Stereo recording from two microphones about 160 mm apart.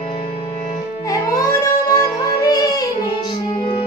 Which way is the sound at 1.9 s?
25° left (ahead or behind).